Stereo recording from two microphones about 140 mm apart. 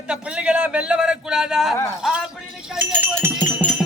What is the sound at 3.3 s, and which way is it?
Music, 10° right (ahead or behind).